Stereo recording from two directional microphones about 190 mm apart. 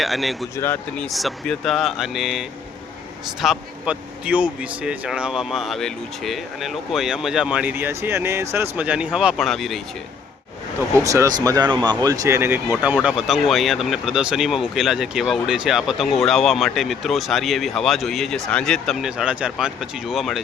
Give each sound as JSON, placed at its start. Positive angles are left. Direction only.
{"t": 0.0, "sound": "speech", "side_deg": 0}
{"t": 0.5, "sound": "speech", "side_deg": 10}
{"t": 10.9, "sound": "speech", "side_deg": -15}